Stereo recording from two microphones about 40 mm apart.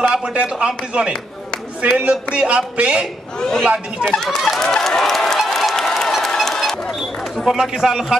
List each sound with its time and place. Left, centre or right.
0.1 s speech: right
3.3 s speech: centre
4.5 s a sound: centre
5.8 s applause: centre
6.2 s a sound: centre
7.4 s speech: centre